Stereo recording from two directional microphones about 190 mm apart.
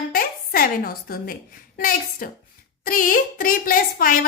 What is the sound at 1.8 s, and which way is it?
A woman's voice, 45° left (ahead or behind).